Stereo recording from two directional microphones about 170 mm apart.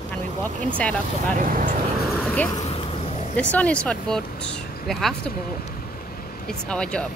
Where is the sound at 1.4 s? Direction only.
50° right (ahead or behind).